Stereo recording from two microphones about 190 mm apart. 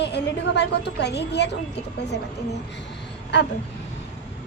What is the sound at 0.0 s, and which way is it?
A woman's voice, 65° left (ahead or behind).